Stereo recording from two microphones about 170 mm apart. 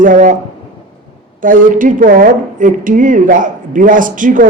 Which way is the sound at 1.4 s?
50° right (ahead or behind).